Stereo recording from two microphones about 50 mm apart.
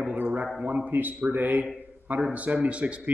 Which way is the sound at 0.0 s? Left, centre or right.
Right.